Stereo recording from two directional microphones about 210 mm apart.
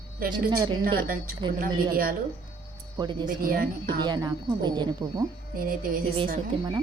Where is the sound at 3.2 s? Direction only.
45° right (ahead or behind).